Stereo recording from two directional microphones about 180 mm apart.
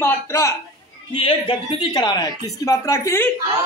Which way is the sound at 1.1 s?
25° left (ahead or behind).